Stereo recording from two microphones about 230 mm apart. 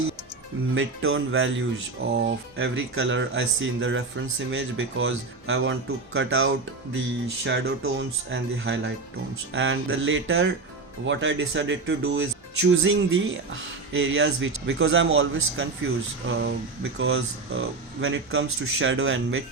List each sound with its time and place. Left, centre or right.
0.7 s speech: right